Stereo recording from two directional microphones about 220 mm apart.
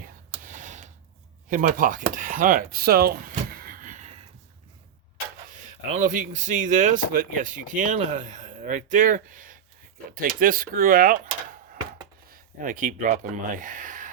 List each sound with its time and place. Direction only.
0.4 s a sound: 35° right (ahead or behind)
1.5 s speech: 35° right (ahead or behind)
5.9 s speech: 35° right (ahead or behind)
12.3 s speech: 35° right (ahead or behind)